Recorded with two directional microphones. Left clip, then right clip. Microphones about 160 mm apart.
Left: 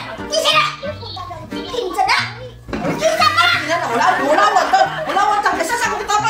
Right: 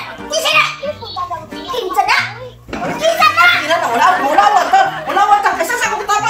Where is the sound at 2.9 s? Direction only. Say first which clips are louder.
Right 3 dB; centre (ahead or behind).